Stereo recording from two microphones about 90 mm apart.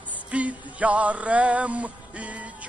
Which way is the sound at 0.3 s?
15° right (ahead or behind).